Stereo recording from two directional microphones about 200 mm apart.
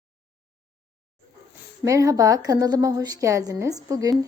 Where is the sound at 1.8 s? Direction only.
15° right (ahead or behind).